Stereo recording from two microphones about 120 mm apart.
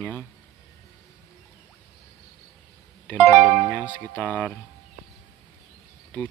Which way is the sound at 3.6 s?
15° left (ahead or behind).